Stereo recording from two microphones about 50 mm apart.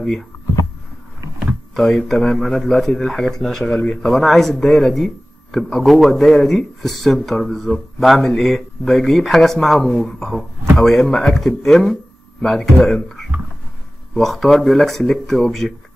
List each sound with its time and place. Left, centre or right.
1.8 s speech: centre
3.6 s speech: centre
3.9 s speech: centre